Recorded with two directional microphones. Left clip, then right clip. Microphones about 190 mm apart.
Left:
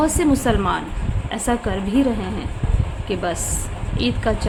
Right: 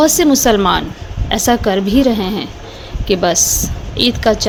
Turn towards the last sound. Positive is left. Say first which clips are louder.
# right 9 dB
turn(degrees=-35)  # may be behind; listen again after turning